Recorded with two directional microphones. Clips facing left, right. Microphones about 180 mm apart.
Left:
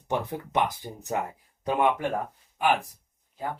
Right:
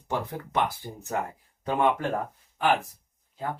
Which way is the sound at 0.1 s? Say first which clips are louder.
Left 2 dB; 20° left (ahead or behind).